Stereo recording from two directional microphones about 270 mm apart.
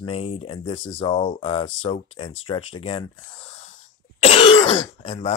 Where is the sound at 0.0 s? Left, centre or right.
Left.